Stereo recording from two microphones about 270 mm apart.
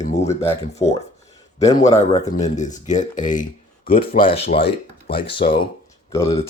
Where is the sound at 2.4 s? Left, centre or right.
Left.